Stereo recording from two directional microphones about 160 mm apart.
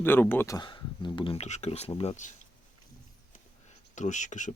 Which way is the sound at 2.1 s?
50° left (ahead or behind).